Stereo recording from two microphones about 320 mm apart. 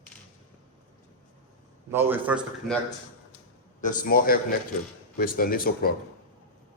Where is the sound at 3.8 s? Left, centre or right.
Left.